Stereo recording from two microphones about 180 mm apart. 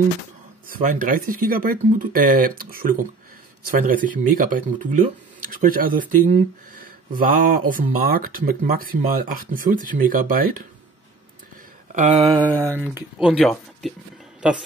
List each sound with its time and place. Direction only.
0.7 s speech: 50° right (ahead or behind)
11.9 s a sound: 40° right (ahead or behind)
12.4 s mantra: 10° left (ahead or behind)
12.9 s speech: centre (ahead or behind)